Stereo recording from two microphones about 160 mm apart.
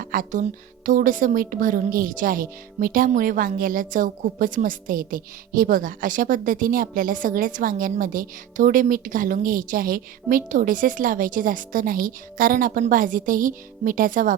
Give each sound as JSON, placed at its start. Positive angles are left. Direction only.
{"t": 0.0, "sound": "speech", "side_deg": -60}